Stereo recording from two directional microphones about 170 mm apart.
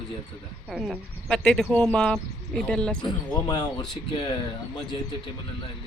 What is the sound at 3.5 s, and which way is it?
Speech, 25° left (ahead or behind).